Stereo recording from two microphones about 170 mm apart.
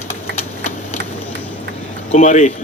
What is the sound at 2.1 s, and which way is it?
Speech, 45° left (ahead or behind).